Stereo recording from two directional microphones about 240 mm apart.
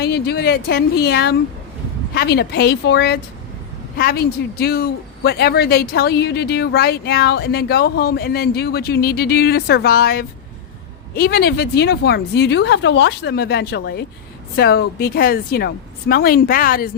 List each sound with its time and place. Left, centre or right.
0.0 s a man's voice: left